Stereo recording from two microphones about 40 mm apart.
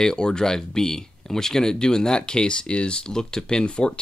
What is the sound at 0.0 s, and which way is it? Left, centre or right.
Speech, centre.